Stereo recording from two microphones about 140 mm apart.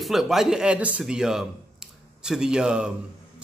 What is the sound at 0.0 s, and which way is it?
A man's voice, centre (ahead or behind).